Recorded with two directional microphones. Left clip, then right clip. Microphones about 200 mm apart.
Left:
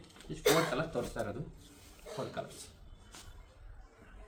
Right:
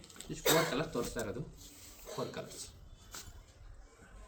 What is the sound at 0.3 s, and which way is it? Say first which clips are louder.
Speech: left 1 dB; 15° left (ahead or behind).